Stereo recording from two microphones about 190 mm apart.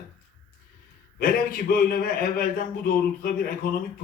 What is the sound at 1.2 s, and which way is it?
Speech, 50° left (ahead or behind).